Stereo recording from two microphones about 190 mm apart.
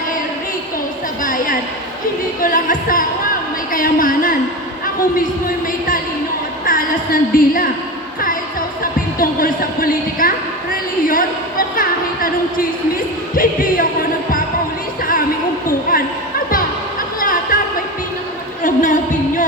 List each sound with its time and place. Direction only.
1.2 s a woman's voice: 45° left (ahead or behind)
6.7 s a woman's voice: 45° left (ahead or behind)
8.8 s a sound: 45° left (ahead or behind)
13.3 s speech: 45° left (ahead or behind)
17.2 s a sound: 45° left (ahead or behind)
18.6 s singing: 45° left (ahead or behind)